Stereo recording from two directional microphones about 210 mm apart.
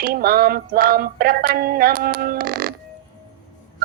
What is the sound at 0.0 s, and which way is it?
Music, 45° right (ahead or behind).